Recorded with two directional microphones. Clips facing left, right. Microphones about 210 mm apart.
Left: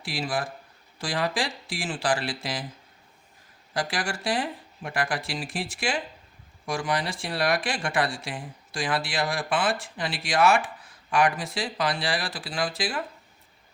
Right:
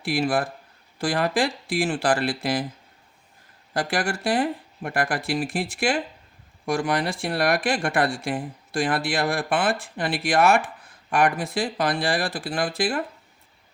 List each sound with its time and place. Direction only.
0.0 s speech: 60° right (ahead or behind)
3.8 s speech: 55° right (ahead or behind)